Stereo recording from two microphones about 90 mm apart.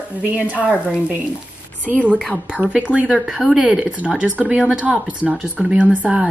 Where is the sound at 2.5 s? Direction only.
15° right (ahead or behind).